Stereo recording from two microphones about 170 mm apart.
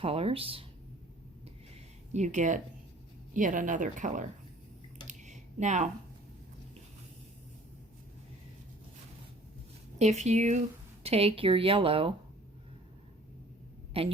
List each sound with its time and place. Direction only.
0.0 s speech: 35° right (ahead or behind)
2.1 s speech: 45° right (ahead or behind)
5.0 s a sound: 45° right (ahead or behind)
10.0 s speech: 40° right (ahead or behind)
14.0 s speech: 35° right (ahead or behind)